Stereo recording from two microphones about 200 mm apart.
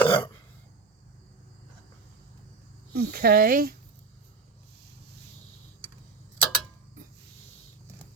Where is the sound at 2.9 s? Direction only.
50° right (ahead or behind).